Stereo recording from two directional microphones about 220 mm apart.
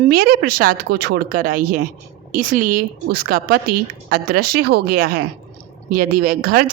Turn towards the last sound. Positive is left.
turn(degrees=-40)  # may be behind; listen again after turning